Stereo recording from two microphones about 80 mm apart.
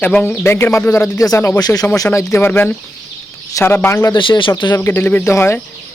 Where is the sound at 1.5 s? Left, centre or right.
Left.